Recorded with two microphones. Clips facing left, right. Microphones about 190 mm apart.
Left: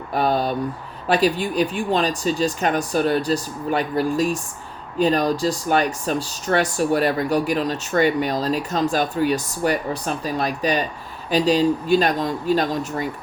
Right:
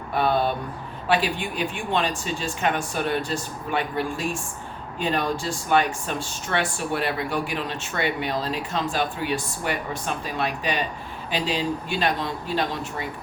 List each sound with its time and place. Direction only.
0.1 s speech: 40° left (ahead or behind)